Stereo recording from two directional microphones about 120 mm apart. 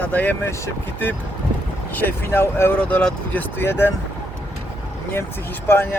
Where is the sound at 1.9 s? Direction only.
15° left (ahead or behind).